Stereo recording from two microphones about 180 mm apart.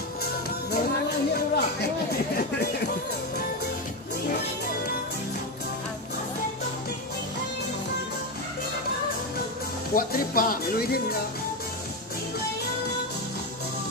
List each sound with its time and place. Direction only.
0.2 s music: 60° left (ahead or behind)
9.9 s speech: 55° left (ahead or behind)